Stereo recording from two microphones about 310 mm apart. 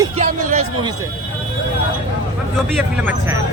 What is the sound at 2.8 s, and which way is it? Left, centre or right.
Speech, centre.